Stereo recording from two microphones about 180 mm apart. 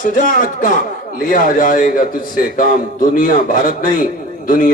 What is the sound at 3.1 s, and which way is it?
A man's voice, 50° left (ahead or behind).